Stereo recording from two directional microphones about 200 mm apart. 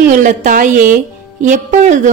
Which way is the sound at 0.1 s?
40° right (ahead or behind).